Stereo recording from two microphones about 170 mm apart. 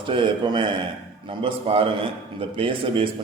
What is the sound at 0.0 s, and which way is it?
A man's voice, 30° right (ahead or behind).